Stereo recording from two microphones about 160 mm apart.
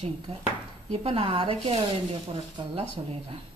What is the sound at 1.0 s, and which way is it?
Speech, 35° right (ahead or behind).